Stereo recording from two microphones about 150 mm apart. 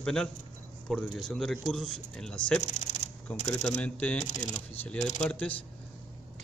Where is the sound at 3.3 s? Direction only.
10° left (ahead or behind).